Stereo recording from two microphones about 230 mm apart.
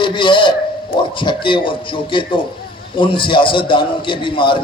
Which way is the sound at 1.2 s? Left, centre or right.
Left.